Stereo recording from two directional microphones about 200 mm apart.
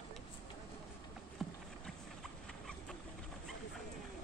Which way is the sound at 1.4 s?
Centre (ahead or behind).